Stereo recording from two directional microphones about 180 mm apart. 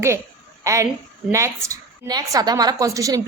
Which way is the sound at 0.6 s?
15° right (ahead or behind).